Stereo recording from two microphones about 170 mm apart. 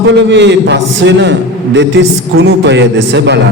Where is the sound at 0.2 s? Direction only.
90° right.